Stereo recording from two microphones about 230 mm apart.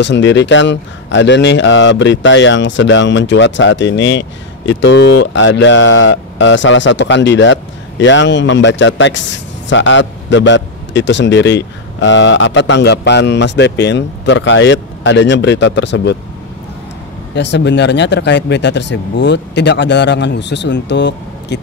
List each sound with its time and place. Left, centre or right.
0.0 s speech: left
17.3 s speech: left